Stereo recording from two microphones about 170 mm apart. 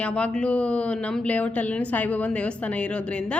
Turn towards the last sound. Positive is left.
turn(degrees=5)  # may be behind; listen again after turning